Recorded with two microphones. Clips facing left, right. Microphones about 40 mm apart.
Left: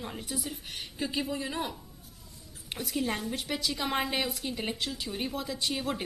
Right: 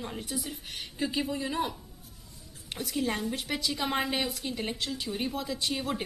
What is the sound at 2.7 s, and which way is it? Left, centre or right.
A woman's voice, centre.